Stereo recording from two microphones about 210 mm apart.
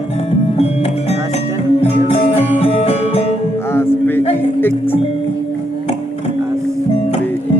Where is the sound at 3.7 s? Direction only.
10° left (ahead or behind).